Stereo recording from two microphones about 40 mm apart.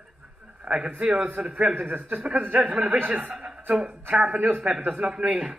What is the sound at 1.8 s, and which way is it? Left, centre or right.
Speech, right.